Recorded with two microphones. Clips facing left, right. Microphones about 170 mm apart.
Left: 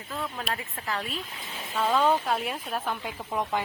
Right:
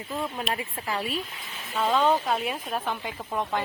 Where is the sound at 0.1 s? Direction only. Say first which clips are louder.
Right 3 dB; 15° right (ahead or behind).